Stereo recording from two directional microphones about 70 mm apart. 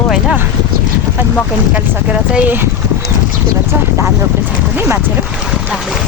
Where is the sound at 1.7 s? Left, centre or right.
Centre.